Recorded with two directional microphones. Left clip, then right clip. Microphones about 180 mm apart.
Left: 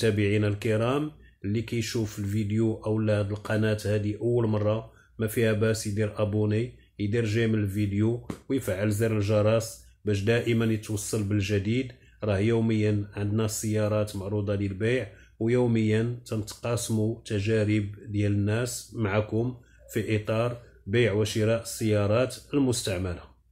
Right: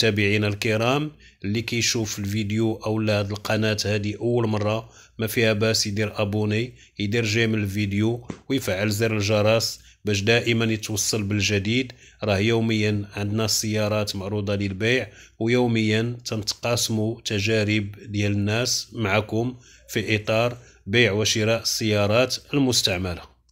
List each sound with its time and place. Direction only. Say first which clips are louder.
0.0 s speech: right 4 dB; 25° right (ahead or behind)